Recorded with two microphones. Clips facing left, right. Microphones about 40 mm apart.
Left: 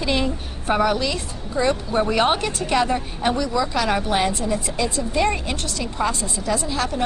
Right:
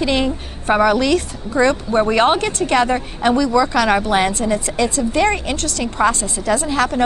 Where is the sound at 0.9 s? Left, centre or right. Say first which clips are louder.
Right 8 dB; right.